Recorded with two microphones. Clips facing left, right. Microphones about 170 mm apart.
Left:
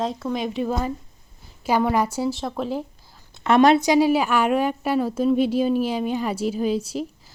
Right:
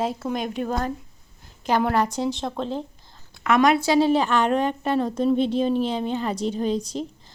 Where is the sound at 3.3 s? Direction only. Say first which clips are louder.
Left 3 dB; 30° left (ahead or behind).